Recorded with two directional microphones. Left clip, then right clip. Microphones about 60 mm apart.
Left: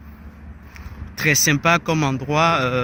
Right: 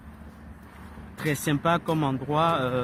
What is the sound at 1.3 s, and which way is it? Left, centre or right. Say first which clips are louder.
Speech: left 8 dB; left.